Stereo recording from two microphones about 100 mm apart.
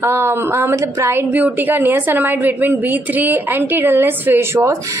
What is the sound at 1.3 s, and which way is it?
A woman's voice, 15° right (ahead or behind).